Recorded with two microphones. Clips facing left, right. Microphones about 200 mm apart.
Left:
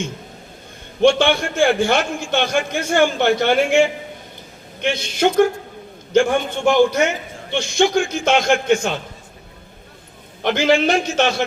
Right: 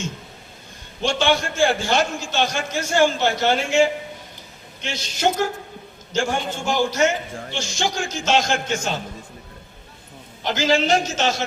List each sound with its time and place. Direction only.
1.0 s a man's voice: 55° left (ahead or behind)
4.8 s a man's voice: 55° left (ahead or behind)
10.4 s a man's voice: 60° left (ahead or behind)